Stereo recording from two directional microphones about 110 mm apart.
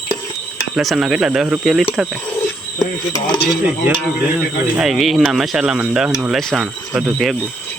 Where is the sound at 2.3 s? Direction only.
30° left (ahead or behind).